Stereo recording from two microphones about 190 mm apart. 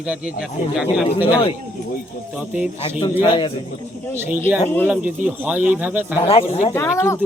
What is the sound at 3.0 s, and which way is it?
Speech, 25° left (ahead or behind).